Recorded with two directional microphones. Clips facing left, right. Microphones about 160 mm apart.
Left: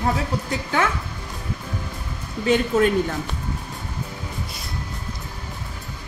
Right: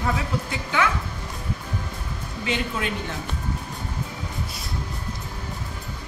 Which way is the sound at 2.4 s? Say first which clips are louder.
Left 9 dB; 40° left (ahead or behind).